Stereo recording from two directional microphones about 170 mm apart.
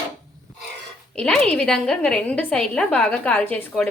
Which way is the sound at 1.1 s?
5° left (ahead or behind).